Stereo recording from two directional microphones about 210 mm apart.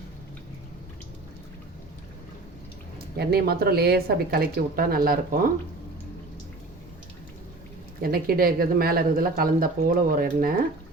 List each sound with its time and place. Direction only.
3.2 s speech: 50° right (ahead or behind)
8.0 s speech: 45° right (ahead or behind)